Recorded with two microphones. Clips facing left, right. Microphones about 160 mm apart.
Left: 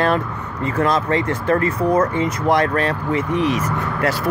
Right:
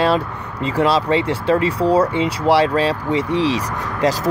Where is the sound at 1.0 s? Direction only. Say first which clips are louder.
Right 2 dB; 15° right (ahead or behind).